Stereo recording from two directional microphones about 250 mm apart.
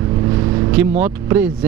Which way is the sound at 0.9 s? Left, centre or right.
Centre.